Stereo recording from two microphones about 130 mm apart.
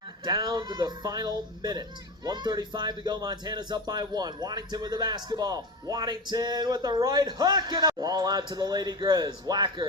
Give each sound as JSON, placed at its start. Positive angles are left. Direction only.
{"t": 0.3, "sound": "speech", "side_deg": -30}